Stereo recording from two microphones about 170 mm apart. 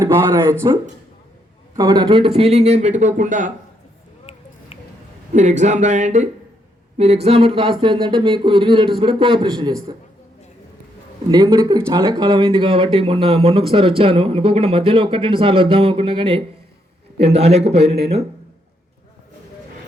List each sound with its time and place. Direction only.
0.0 s speech: 15° right (ahead or behind)
1.7 s speech: 25° right (ahead or behind); by 3.5 s 45° right (ahead or behind)
5.3 s speech: 45° right (ahead or behind)
6.9 s a sound: 40° right (ahead or behind)
11.3 s speech: 25° right (ahead or behind)